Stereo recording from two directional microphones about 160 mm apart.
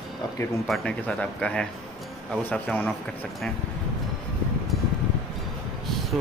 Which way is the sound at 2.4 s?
10° left (ahead or behind).